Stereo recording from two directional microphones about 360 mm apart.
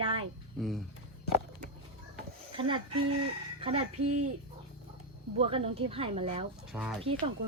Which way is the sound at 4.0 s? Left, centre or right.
Right.